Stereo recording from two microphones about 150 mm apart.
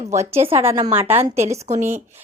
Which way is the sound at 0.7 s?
25° right (ahead or behind).